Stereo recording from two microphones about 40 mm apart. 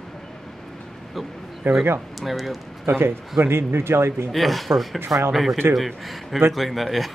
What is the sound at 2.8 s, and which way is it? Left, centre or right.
A man's voice, right.